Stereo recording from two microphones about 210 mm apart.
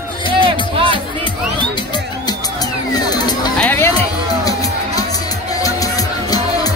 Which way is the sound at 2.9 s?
20° left (ahead or behind).